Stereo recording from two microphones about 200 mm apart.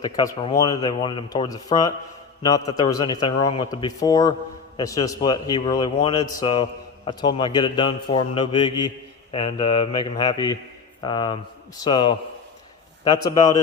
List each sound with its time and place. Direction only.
0.0 s a man's voice: 20° left (ahead or behind)
13.3 s a man's voice: 20° left (ahead or behind)